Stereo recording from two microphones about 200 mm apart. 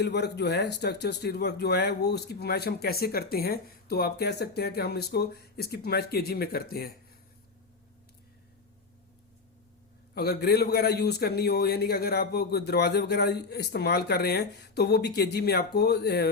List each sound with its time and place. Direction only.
0.0 s speech: 55° left (ahead or behind)
10.2 s speech: 55° left (ahead or behind)